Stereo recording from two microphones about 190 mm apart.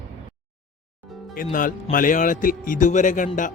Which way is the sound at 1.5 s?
45° left (ahead or behind).